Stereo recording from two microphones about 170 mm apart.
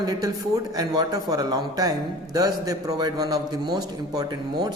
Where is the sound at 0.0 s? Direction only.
25° right (ahead or behind).